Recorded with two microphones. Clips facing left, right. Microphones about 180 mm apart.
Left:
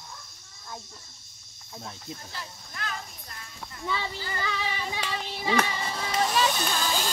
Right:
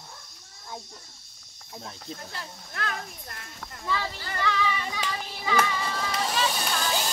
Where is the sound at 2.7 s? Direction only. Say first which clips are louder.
Right 4 dB; 60° right (ahead or behind).